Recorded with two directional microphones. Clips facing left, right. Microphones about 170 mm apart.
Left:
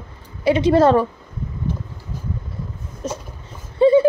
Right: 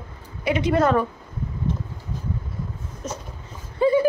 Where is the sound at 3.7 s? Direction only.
25° left (ahead or behind).